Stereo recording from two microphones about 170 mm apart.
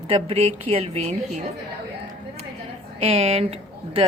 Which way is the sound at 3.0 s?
35° right (ahead or behind).